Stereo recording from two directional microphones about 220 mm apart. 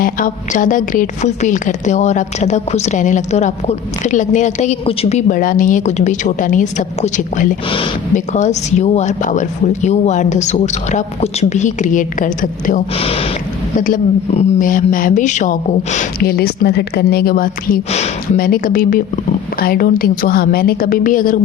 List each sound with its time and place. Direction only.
0.0 s a woman's voice: 35° left (ahead or behind)
13.7 s a woman's voice: 35° left (ahead or behind)